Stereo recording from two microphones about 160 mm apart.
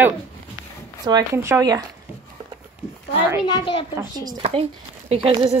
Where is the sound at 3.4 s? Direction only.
30° left (ahead or behind).